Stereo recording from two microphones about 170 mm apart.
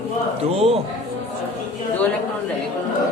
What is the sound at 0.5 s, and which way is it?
Speech, 35° right (ahead or behind).